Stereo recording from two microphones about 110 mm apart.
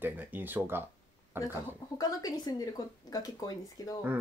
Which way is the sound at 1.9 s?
35° left (ahead or behind).